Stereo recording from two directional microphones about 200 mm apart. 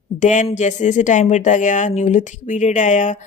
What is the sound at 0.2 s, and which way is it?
Speech, 40° left (ahead or behind).